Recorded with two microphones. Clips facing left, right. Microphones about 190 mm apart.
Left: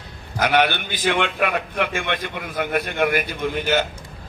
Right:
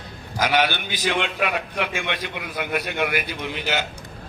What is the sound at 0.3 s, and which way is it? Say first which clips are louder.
A man's voice: left 2 dB; 60° left (ahead or behind).